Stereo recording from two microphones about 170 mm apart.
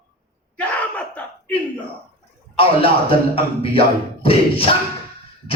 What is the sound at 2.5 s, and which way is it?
Music, 35° left (ahead or behind).